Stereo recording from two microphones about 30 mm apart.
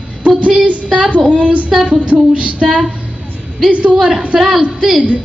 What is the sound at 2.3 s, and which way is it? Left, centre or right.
Speech, right.